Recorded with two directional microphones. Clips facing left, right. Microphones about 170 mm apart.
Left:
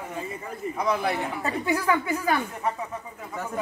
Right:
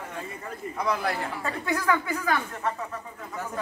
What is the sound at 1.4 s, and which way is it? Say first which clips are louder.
Speech: left 3 dB; 20° left (ahead or behind).